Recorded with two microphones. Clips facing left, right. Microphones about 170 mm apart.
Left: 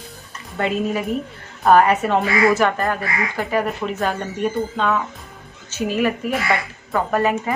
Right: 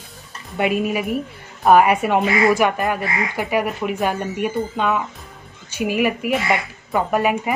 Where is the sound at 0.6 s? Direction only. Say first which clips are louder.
Right 1 dB; 10° right (ahead or behind).